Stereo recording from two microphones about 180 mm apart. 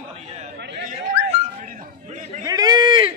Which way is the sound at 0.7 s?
35° right (ahead or behind).